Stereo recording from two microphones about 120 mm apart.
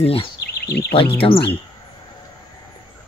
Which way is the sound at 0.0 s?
55° left (ahead or behind).